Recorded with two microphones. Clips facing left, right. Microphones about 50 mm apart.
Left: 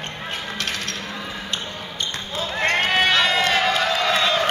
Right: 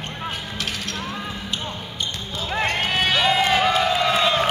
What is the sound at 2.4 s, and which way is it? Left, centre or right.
Basketball bounce, centre.